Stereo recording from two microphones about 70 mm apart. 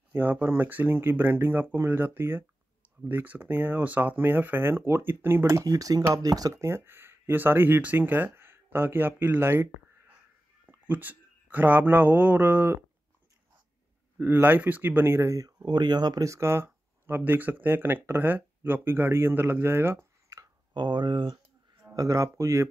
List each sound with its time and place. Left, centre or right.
0.1 s speech: right
5.7 s speech: right
6.6 s speech: right
14.1 s speech: right
15.6 s speech: right
16.3 s speech: right
20.7 s speech: right
21.9 s speech: right